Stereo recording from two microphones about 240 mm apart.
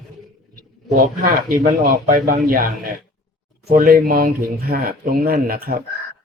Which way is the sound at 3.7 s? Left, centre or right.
Right.